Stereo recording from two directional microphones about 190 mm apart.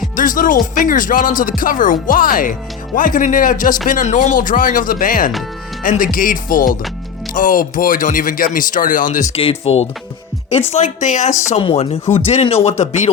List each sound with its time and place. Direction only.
0.2 s speech: 45° left (ahead or behind)
9.4 s speech: 30° left (ahead or behind)